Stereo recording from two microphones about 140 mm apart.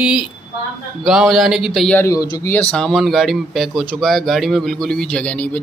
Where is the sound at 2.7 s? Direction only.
5° left (ahead or behind).